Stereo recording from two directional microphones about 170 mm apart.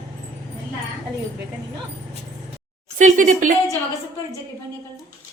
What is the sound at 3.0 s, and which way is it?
Speech, 45° right (ahead or behind).